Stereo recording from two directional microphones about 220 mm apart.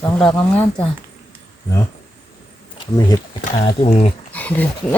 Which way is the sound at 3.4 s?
30° left (ahead or behind).